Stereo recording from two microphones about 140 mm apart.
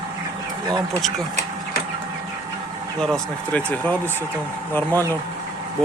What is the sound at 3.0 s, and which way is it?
Speech, 5° left (ahead or behind).